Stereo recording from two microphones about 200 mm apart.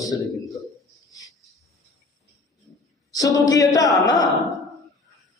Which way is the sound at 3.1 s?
15° left (ahead or behind).